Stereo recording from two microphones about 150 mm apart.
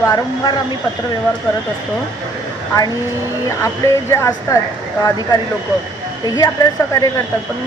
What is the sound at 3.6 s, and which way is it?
Speech, 20° left (ahead or behind).